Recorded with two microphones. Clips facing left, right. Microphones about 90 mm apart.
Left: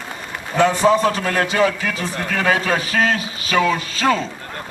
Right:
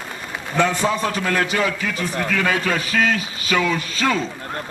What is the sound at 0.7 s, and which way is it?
Speech, 35° left (ahead or behind).